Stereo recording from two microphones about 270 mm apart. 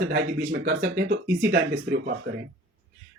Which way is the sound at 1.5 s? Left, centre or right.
Right.